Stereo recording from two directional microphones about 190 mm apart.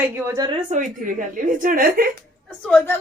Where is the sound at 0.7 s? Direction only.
45° right (ahead or behind).